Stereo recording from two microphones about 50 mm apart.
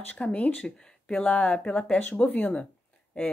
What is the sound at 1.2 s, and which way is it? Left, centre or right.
Speech, left.